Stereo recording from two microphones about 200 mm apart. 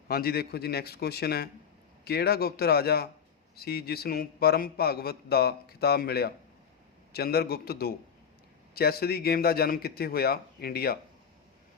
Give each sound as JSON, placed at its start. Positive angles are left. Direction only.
{"t": 0.1, "sound": "a man's voice", "side_deg": 50}